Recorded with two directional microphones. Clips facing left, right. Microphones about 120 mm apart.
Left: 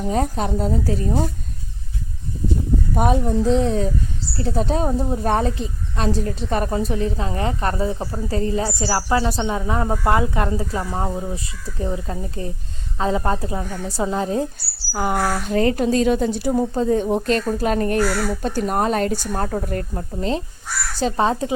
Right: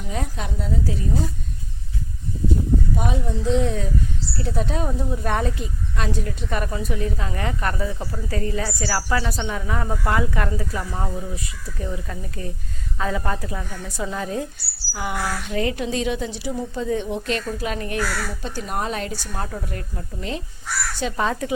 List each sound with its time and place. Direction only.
0.0 s a woman's voice: 40° left (ahead or behind)
2.9 s a woman's voice: 50° left (ahead or behind); by 14.4 s 30° left (ahead or behind)
14.9 s speech: 45° left (ahead or behind); by 21.5 s 25° left (ahead or behind)